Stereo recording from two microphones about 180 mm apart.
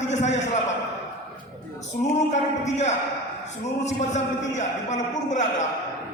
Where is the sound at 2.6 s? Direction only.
40° left (ahead or behind).